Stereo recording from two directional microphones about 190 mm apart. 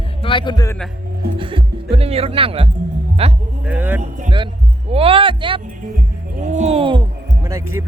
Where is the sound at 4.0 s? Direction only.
40° right (ahead or behind).